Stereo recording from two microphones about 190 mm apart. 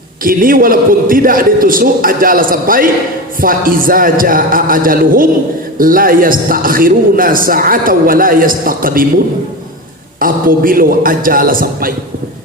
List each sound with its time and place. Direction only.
0.3 s a man's voice: 50° right (ahead or behind)